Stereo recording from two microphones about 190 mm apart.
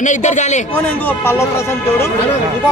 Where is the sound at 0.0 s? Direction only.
40° left (ahead or behind).